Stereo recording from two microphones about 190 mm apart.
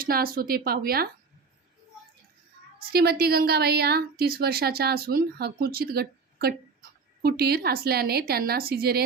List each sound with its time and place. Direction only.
0.0 s speech: 50° right (ahead or behind)
2.7 s a woman's voice: 55° right (ahead or behind)